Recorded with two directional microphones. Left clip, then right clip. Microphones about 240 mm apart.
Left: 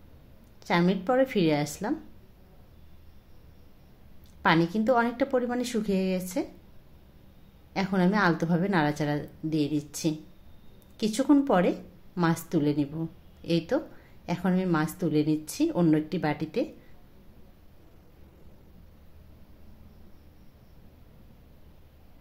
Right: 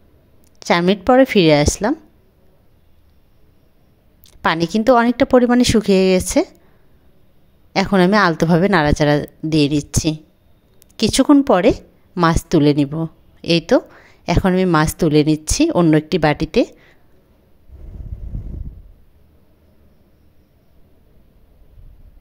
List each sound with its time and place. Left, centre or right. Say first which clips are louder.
0.6 s a woman's voice: right 11 dB; right
4.2 s a woman's voice: right 6 dB; right
7.7 s a woman's voice: right 13 dB; right